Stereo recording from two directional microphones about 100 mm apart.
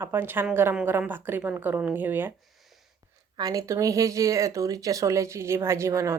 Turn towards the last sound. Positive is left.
turn(degrees=-30)  # may be behind; listen again after turning